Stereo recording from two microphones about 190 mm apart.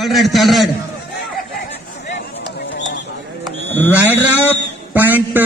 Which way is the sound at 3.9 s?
10° right (ahead or behind).